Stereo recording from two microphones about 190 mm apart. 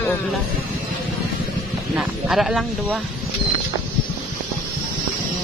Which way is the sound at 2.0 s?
5° right (ahead or behind).